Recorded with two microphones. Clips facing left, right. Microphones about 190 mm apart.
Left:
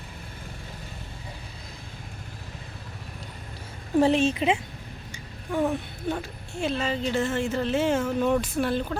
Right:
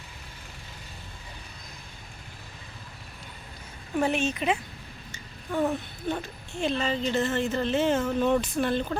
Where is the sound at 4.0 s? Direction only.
30° left (ahead or behind).